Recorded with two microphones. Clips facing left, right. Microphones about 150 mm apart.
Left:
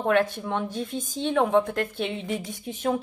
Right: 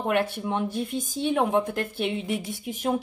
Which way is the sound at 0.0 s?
10° right (ahead or behind).